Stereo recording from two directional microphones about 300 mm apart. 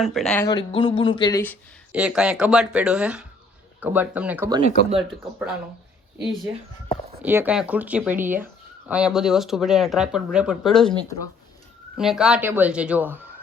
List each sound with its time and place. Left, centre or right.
0.0 s speech: centre
0.4 s speech: centre
1.9 s speech: centre
4.9 s speech: centre
11.9 s speech: centre